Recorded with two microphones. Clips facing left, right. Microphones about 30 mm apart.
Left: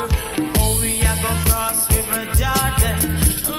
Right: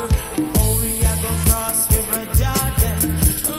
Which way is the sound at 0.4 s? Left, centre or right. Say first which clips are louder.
Even; left.